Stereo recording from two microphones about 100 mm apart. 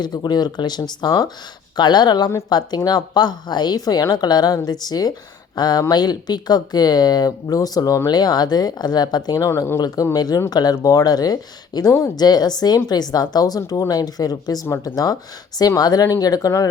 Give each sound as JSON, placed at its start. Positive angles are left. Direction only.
{"t": 0.0, "sound": "speech", "side_deg": 45}
{"t": 12.1, "sound": "speech", "side_deg": 40}